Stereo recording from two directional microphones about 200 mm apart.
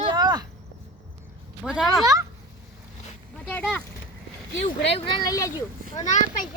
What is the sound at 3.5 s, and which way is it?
Speech, 5° left (ahead or behind).